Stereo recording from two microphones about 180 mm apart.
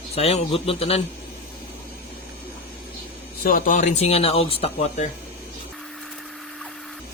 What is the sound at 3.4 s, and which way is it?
Speech, 50° left (ahead or behind).